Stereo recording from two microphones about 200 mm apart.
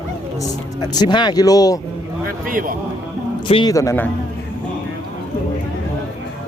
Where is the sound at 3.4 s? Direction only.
25° left (ahead or behind).